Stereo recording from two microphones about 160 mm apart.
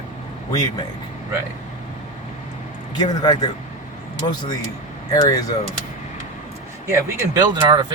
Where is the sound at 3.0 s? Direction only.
25° left (ahead or behind).